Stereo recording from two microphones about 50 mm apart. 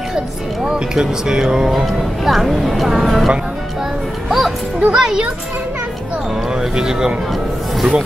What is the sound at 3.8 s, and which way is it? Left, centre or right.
Music, centre.